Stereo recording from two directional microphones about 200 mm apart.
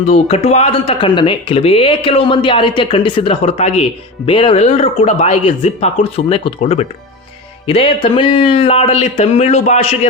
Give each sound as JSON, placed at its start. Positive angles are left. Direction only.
{"t": 0.0, "sound": "speech", "side_deg": 30}